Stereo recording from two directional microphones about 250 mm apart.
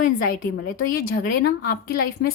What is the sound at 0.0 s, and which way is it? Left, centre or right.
A woman's voice, left.